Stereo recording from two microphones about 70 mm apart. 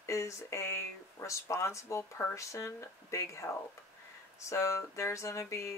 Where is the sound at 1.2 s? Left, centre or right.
Left.